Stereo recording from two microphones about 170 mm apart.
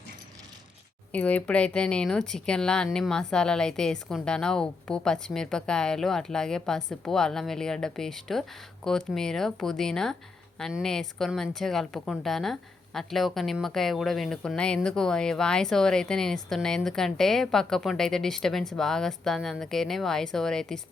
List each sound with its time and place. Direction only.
1.1 s speech: 10° left (ahead or behind)